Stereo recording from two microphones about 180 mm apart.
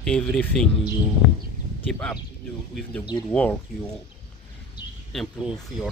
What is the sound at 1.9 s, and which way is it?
Speech, 5° left (ahead or behind).